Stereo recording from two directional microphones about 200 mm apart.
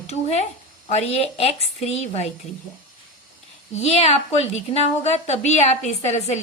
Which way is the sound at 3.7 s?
30° left (ahead or behind).